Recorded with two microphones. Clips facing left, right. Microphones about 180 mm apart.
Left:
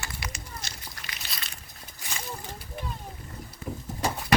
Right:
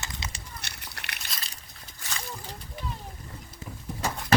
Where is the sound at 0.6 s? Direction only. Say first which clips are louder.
Left 1 dB; 65° right (ahead or behind).